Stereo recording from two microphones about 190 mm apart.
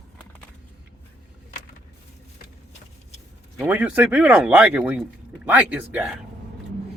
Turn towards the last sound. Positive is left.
turn(degrees=-5)  # may be behind; listen again after turning